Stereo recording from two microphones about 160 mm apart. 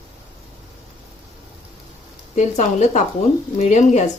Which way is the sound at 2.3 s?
45° left (ahead or behind).